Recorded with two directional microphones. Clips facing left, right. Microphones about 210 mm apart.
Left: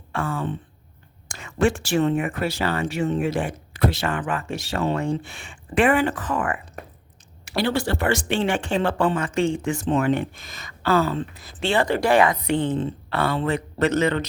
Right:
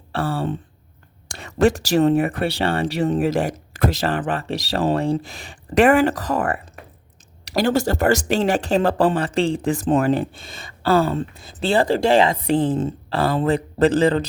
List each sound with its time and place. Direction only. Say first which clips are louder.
0.1 s speech: right 3 dB; 35° right (ahead or behind)
6.8 s a sound: left 4 dB; 45° left (ahead or behind)
7.4 s speech: right 4 dB; 45° right (ahead or behind)
10.1 s speech: right 2 dB; 30° right (ahead or behind)